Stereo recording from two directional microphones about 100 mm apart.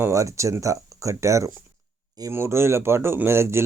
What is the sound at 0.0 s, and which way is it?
Speech, 30° right (ahead or behind).